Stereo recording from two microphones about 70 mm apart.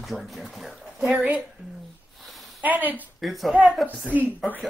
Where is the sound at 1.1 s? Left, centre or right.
Right.